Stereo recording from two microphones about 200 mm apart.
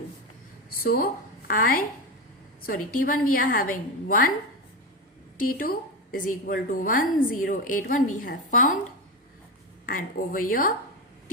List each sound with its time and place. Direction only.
0.7 s a woman's voice: 45° left (ahead or behind)
5.4 s a woman's voice: 45° left (ahead or behind)
9.8 s a woman's voice: 45° left (ahead or behind)